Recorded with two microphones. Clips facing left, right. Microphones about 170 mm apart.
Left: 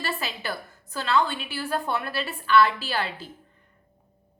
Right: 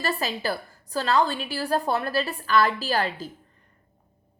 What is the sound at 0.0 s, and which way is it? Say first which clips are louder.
A woman's voice: right 4 dB; 40° right (ahead or behind).